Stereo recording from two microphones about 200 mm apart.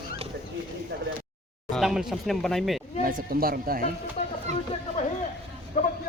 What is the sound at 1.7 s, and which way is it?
Speech, centre (ahead or behind).